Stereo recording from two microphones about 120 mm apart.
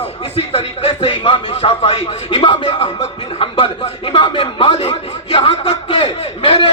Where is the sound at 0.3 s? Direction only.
55° left (ahead or behind).